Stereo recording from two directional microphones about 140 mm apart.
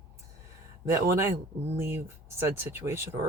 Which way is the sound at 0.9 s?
20° right (ahead or behind).